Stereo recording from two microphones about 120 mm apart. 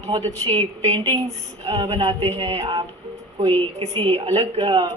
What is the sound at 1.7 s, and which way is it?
A woman's voice, 55° right (ahead or behind).